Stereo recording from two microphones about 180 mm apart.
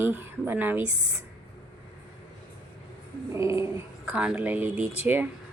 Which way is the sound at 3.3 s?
15° right (ahead or behind).